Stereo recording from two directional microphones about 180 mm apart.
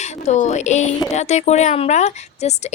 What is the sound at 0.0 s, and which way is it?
A woman's voice, 40° left (ahead or behind).